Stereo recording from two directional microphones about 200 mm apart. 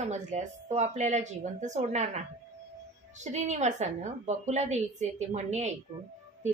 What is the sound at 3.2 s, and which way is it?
Speech, 35° right (ahead or behind).